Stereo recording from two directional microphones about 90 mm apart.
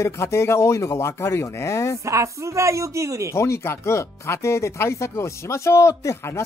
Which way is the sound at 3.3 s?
30° left (ahead or behind).